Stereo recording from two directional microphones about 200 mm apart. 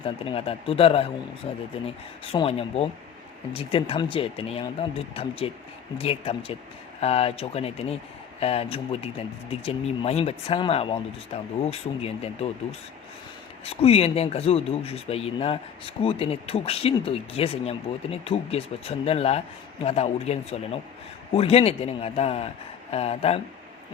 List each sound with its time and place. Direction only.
0.0 s speech: 30° left (ahead or behind)
13.7 s speech: 30° left (ahead or behind)